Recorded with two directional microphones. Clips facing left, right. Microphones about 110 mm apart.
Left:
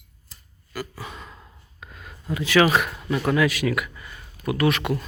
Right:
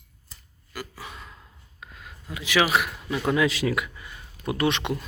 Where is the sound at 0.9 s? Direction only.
15° left (ahead or behind).